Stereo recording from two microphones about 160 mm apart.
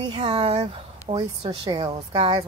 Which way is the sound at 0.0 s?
30° right (ahead or behind).